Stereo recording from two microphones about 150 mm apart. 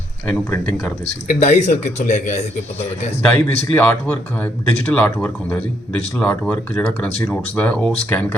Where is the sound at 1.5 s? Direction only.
50° left (ahead or behind).